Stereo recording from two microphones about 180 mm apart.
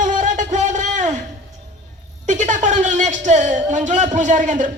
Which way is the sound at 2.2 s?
40° right (ahead or behind).